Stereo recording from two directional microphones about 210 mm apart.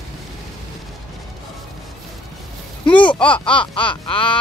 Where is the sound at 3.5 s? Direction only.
25° left (ahead or behind).